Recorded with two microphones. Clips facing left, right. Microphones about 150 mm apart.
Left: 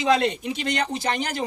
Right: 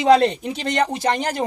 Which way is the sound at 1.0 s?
50° right (ahead or behind).